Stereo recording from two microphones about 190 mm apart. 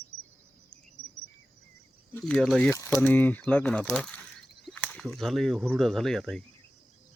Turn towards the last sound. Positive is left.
turn(degrees=5)  # may be behind; listen again after turning